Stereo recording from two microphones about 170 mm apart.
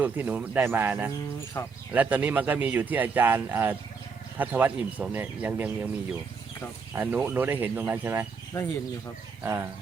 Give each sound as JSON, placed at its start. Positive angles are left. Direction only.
{"t": 0.0, "sound": "speech", "side_deg": -10}
{"t": 1.6, "sound": "speech", "side_deg": 20}
{"t": 1.9, "sound": "speech", "side_deg": -10}
{"t": 6.9, "sound": "speech", "side_deg": -10}
{"t": 8.5, "sound": "speech", "side_deg": 20}
{"t": 9.4, "sound": "speech", "side_deg": -15}